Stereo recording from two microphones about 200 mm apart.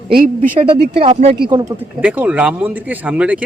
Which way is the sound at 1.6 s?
5° right (ahead or behind).